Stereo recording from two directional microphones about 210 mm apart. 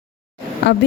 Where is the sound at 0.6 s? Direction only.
55° left (ahead or behind).